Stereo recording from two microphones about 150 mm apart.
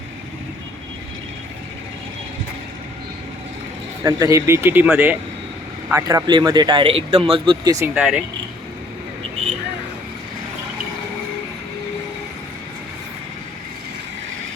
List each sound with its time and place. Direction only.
4.0 s speech: 20° right (ahead or behind)
5.9 s speech: 20° right (ahead or behind)
7.9 s speech: 5° right (ahead or behind)